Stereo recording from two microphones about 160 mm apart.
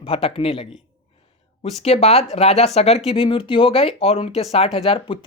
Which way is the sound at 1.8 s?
40° left (ahead or behind).